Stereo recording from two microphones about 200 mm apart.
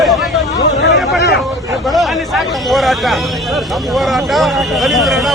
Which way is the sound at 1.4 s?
Centre (ahead or behind).